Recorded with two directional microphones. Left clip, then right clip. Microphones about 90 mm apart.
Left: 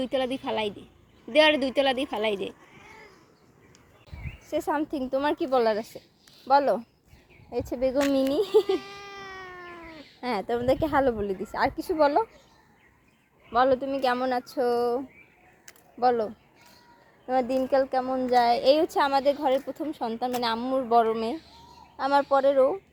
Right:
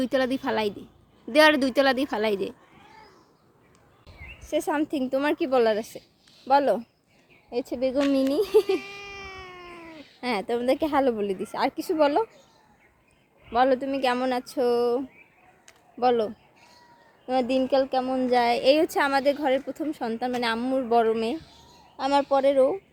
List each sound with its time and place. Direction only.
0.4 s a woman's voice: 90° right
4.4 s a sound: 30° right (ahead or behind)
4.8 s a woman's voice: 40° right (ahead or behind)
7.5 s a woman's voice: 15° right (ahead or behind)
9.4 s cat: 15° right (ahead or behind)
10.2 s a woman's voice: 30° right (ahead or behind)
13.5 s a woman's voice: 35° right (ahead or behind)
18.0 s a woman's voice: 45° right (ahead or behind)
20.6 s a woman's voice: 45° right (ahead or behind)